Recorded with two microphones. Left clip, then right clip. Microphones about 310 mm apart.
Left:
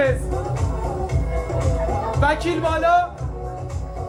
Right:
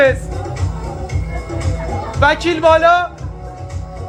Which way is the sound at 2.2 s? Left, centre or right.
Right.